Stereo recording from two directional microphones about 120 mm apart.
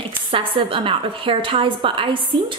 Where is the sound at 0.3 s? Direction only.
45° right (ahead or behind).